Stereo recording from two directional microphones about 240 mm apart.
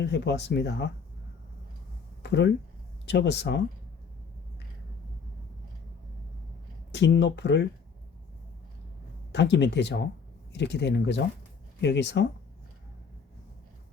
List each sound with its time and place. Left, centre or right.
0.0 s speech: left
2.2 s speech: left
6.9 s speech: left
9.3 s speech: left